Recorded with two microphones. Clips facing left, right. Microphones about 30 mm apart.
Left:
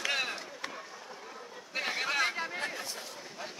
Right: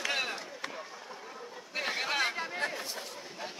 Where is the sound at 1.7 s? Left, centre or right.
Centre.